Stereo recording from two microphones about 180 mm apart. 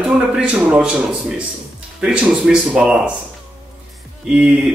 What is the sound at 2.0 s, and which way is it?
A man's voice, 5° right (ahead or behind).